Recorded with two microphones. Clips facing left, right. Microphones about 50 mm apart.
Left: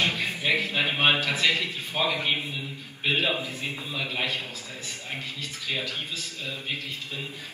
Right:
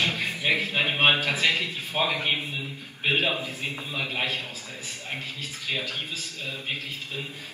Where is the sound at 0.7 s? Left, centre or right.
Right.